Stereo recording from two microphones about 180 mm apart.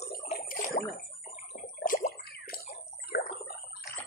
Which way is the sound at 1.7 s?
50° left (ahead or behind).